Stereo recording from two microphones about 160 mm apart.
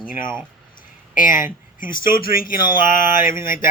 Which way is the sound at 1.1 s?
55° left (ahead or behind).